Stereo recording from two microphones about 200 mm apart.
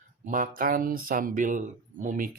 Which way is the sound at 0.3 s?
45° right (ahead or behind).